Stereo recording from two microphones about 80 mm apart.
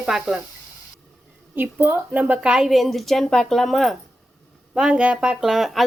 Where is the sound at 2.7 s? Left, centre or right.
Centre.